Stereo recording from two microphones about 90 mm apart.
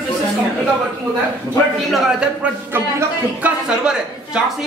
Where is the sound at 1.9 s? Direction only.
5° right (ahead or behind).